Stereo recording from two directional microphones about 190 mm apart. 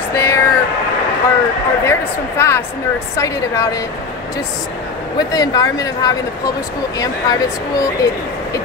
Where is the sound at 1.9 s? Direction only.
15° left (ahead or behind).